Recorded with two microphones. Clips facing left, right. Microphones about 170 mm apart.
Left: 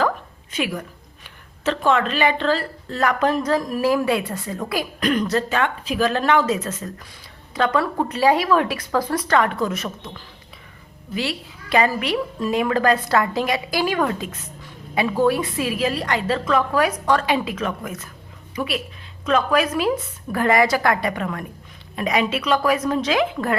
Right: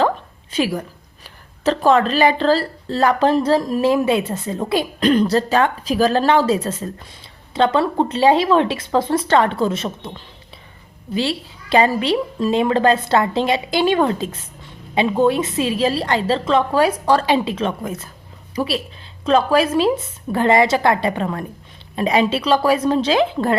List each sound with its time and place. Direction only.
0.5 s a woman's voice: 35° right (ahead or behind)